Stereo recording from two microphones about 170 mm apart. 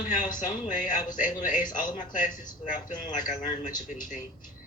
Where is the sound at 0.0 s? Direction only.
50° left (ahead or behind).